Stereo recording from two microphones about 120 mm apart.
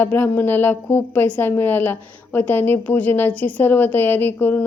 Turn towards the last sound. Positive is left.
turn(degrees=15)  # may be behind; listen again after turning